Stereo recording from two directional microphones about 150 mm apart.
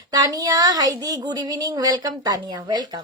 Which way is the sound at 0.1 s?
25° right (ahead or behind).